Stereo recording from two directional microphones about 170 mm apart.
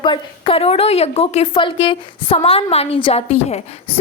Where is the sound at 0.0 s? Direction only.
30° left (ahead or behind).